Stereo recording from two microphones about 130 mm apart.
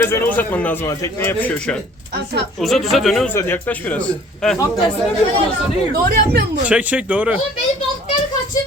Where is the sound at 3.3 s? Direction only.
15° left (ahead or behind).